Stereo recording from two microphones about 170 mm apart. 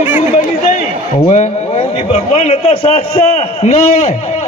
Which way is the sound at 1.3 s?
35° left (ahead or behind).